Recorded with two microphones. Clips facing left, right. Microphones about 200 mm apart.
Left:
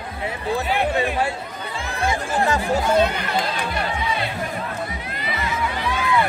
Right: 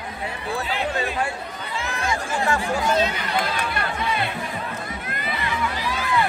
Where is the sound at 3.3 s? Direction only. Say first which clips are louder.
Right 1 dB; 55° right (ahead or behind).